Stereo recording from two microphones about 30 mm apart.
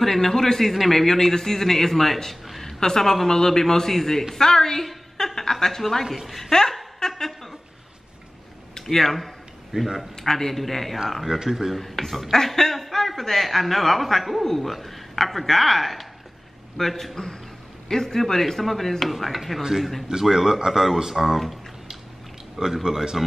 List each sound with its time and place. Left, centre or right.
0.0 s a man's voice: centre
4.4 s a man's voice: centre
6.0 s speech: centre
7.0 s a sound: centre
8.8 s a man's voice: centre
9.7 s speech: right
10.2 s a man's voice: centre
11.3 s speech: centre
11.7 s a man's voice: centre
20.1 s speech: centre
22.8 s speech: centre